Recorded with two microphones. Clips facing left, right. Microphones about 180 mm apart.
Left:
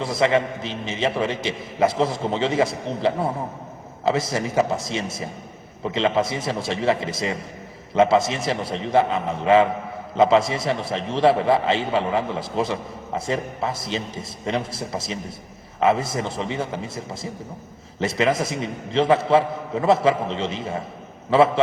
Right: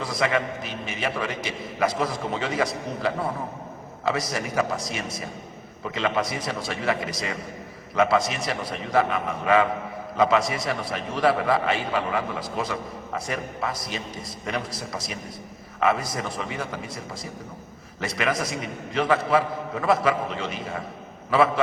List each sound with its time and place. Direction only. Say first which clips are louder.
0.0 s a man's voice: left 5 dB; 25° left (ahead or behind)